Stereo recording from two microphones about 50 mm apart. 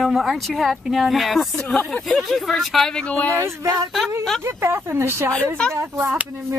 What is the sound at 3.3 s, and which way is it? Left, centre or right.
Speech, right.